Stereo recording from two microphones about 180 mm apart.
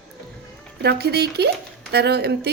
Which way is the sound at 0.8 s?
65° right (ahead or behind).